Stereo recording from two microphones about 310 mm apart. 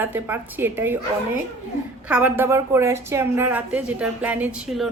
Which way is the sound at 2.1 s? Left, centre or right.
Centre.